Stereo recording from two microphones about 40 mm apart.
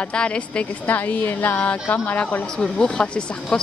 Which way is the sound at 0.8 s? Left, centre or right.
Left.